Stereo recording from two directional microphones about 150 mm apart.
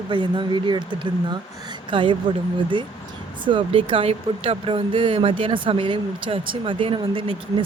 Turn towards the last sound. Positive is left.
turn(degrees=-35)  # may be behind; listen again after turning